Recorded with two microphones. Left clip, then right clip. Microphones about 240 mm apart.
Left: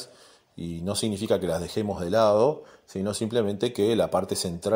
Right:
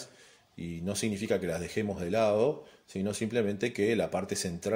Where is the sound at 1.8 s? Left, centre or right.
Centre.